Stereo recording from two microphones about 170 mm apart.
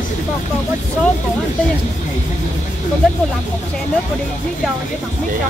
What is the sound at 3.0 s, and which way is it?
Speech, 5° left (ahead or behind).